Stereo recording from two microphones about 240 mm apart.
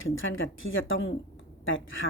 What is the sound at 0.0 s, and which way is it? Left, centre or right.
Speech, left.